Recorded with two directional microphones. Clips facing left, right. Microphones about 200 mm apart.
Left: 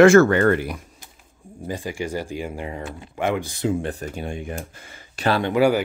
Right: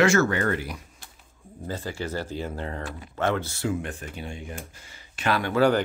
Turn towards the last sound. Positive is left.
turn(degrees=10)  # may be behind; listen again after turning